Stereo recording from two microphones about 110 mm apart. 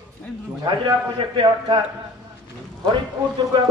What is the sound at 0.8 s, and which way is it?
Speech, 45° right (ahead or behind).